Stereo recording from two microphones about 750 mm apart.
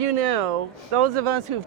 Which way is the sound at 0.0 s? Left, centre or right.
Right.